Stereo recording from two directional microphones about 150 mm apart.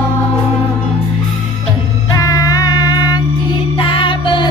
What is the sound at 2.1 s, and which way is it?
Music, 25° left (ahead or behind).